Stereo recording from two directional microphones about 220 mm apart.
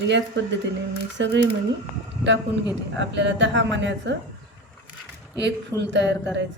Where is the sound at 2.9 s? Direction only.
50° right (ahead or behind).